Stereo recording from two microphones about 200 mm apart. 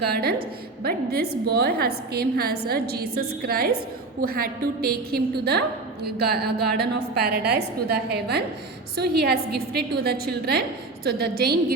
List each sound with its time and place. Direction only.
0.0 s a woman's voice: 50° right (ahead or behind)